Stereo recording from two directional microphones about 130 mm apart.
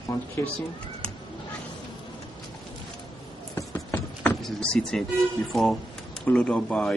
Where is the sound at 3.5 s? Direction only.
15° left (ahead or behind).